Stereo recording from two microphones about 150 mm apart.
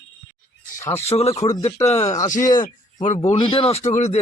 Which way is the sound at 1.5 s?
20° left (ahead or behind).